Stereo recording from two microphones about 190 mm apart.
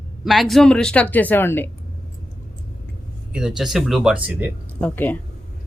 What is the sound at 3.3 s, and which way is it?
Speech, 5° right (ahead or behind).